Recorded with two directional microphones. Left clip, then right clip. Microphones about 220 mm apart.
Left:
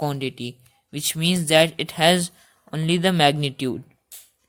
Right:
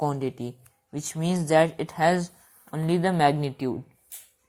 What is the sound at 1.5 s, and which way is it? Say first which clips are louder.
Speech: left 3 dB; 15° left (ahead or behind).